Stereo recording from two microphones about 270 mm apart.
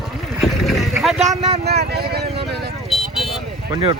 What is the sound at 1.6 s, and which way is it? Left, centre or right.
Vehicle, right.